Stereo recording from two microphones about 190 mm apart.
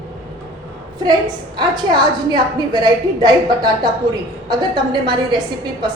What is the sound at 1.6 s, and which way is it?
A woman's voice, 25° right (ahead or behind).